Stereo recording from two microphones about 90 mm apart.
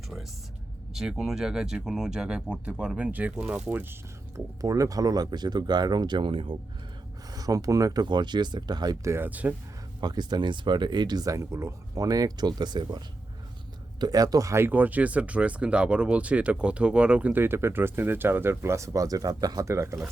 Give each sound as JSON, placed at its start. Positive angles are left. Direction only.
{"t": 0.9, "sound": "speech", "side_deg": -5}
{"t": 4.4, "sound": "speech", "side_deg": -40}
{"t": 7.3, "sound": "speech", "side_deg": -45}
{"t": 9.0, "sound": "speech", "side_deg": -25}
{"t": 10.0, "sound": "speech", "side_deg": -50}
{"t": 14.0, "sound": "speech", "side_deg": -45}
{"t": 17.4, "sound": "speech", "side_deg": -25}
{"t": 19.6, "sound": "speech", "side_deg": -30}